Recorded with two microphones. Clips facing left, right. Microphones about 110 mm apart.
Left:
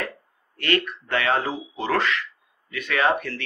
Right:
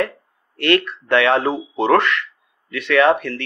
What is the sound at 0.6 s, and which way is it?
Speech, 70° right (ahead or behind).